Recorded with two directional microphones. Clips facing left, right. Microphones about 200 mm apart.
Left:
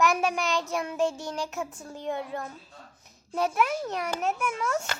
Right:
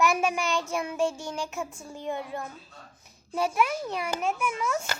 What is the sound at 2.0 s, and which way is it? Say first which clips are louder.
A woman's voice: left 1 dB; 10° right (ahead or behind).